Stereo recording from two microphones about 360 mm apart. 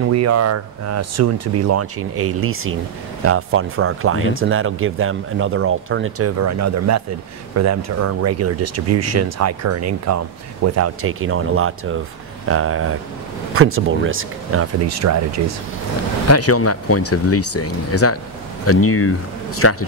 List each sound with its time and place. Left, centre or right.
0.0 s speech: right
16.3 s speech: left